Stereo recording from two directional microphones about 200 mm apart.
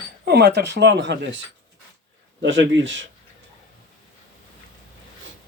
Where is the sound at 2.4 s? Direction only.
65° right (ahead or behind).